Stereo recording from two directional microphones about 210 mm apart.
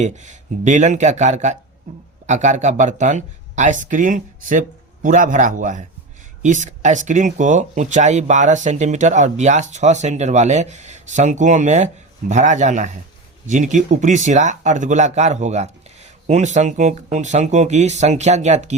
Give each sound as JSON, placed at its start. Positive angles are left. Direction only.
{"t": 0.0, "sound": "speech", "side_deg": -35}